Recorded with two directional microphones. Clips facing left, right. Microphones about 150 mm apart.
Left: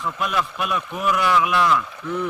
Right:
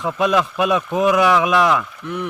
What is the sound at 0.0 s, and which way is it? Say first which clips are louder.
Speech: right 7 dB; 90° right.